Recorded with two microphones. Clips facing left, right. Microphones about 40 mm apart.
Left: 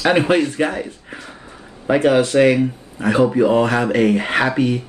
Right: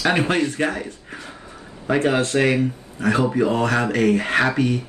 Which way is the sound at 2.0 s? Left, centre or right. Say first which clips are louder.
Left 5 dB; left.